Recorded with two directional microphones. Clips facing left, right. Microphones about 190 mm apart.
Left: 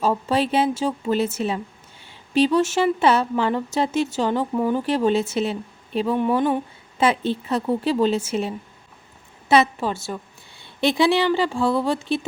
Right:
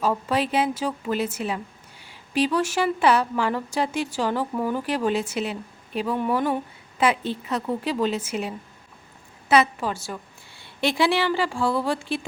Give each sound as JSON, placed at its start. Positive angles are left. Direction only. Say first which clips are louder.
{"t": 0.0, "sound": "speech", "louder": "left 3 dB", "side_deg": 30}